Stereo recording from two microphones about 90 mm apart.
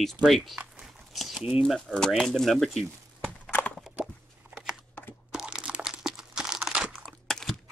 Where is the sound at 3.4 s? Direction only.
20° left (ahead or behind).